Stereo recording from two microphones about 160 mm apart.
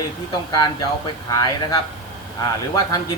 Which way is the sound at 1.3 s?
20° left (ahead or behind).